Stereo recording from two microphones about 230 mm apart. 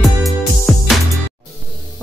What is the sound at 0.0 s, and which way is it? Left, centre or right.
Music, centre.